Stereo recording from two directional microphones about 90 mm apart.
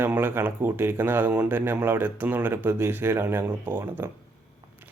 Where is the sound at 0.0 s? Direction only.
25° right (ahead or behind).